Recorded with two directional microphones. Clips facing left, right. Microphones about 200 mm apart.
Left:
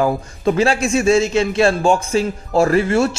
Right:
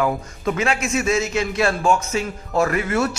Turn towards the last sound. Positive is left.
turn(degrees=30)  # may be behind; listen again after turning